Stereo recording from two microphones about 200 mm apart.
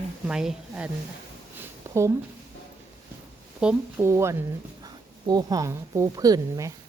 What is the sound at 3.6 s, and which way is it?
A woman's voice, 10° right (ahead or behind).